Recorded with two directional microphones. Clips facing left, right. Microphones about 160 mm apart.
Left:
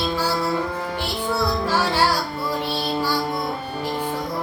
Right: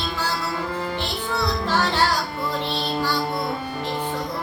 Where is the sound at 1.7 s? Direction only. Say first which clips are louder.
Even; 10° left (ahead or behind).